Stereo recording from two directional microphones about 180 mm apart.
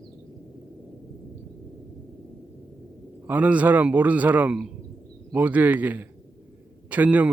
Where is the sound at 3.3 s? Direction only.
10° right (ahead or behind).